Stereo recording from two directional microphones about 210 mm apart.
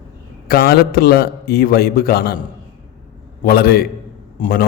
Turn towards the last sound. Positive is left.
turn(degrees=45)  # may be behind; listen again after turning